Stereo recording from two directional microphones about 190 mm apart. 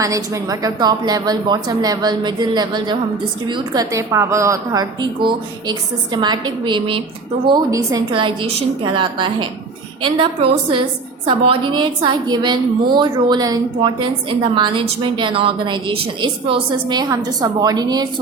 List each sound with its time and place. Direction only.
0.0 s a woman's voice: 15° right (ahead or behind)